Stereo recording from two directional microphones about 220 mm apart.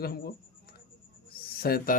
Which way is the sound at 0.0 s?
45° left (ahead or behind).